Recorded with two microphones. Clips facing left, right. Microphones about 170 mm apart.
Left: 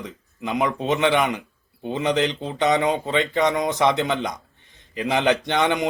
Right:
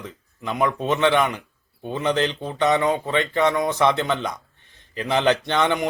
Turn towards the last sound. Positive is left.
turn(degrees=20)  # may be behind; listen again after turning